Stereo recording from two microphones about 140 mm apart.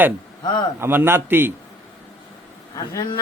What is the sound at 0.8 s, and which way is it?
Speech, 15° right (ahead or behind).